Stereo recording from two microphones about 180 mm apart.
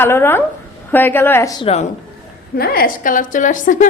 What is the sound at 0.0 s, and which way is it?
Speech, 10° left (ahead or behind).